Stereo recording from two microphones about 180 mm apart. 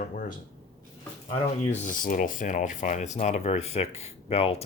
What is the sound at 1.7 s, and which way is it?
Speech, 45° left (ahead or behind).